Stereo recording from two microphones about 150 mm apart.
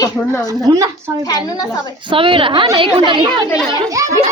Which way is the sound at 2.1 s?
35° right (ahead or behind).